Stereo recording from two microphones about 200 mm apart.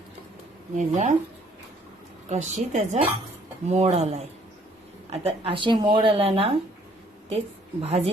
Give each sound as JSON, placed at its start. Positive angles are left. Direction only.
{"t": 0.8, "sound": "a woman's voice", "side_deg": -35}
{"t": 2.3, "sound": "a woman's voice", "side_deg": -35}